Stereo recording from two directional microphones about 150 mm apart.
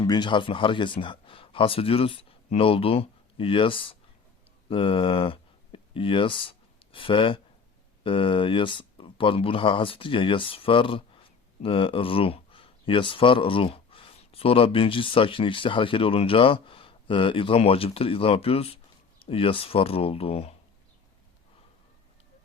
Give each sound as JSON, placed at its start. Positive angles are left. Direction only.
{"t": 0.0, "sound": "speech", "side_deg": 30}